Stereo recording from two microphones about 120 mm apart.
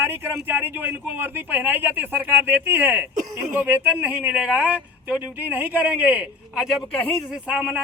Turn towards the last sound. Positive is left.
turn(degrees=-10)  # may be behind; listen again after turning